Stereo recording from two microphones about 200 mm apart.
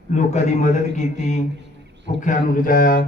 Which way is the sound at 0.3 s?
35° left (ahead or behind).